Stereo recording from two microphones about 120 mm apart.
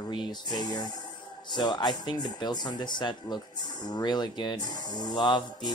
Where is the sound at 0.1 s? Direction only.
40° left (ahead or behind).